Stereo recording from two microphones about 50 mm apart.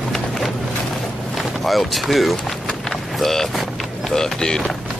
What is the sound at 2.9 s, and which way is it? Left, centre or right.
Vehicle, centre.